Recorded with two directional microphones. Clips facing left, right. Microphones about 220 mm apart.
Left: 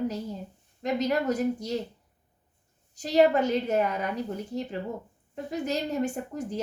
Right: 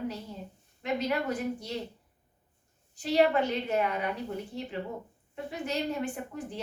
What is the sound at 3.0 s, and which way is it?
A woman's voice, 40° left (ahead or behind).